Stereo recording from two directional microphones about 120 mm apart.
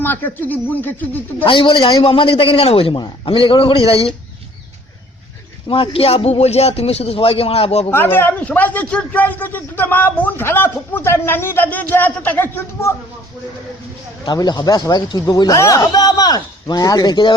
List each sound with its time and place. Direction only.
0.0 s a man's voice: 15° left (ahead or behind)
1.5 s a man's voice: 45° left (ahead or behind)
5.6 s a man's voice: 45° left (ahead or behind)
7.9 s a man's voice: 20° left (ahead or behind)
14.3 s speech: 35° left (ahead or behind)